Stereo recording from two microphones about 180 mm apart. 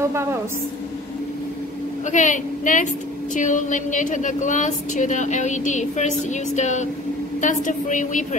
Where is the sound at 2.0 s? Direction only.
45° left (ahead or behind).